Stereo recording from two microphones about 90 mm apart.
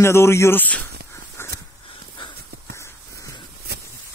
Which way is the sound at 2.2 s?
65° left (ahead or behind).